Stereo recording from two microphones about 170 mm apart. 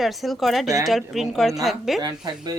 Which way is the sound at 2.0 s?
25° right (ahead or behind).